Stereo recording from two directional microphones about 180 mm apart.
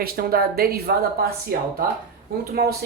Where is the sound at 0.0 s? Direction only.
55° right (ahead or behind).